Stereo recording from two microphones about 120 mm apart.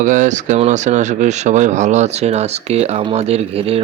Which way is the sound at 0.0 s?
90° right.